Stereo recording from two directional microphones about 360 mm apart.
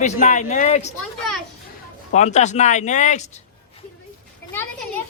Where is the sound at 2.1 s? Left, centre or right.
Centre.